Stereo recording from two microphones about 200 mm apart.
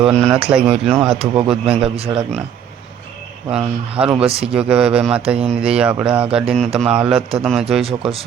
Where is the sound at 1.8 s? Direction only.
30° right (ahead or behind).